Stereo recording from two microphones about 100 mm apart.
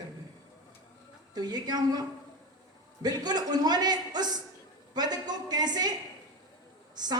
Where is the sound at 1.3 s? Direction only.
45° right (ahead or behind).